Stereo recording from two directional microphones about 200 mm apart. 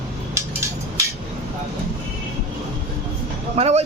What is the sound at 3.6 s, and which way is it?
Speech, 30° right (ahead or behind).